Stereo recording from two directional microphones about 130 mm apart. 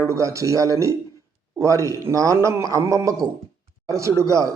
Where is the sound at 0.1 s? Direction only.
25° right (ahead or behind).